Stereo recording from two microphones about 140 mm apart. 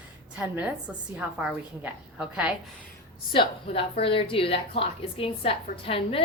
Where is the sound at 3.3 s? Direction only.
40° left (ahead or behind).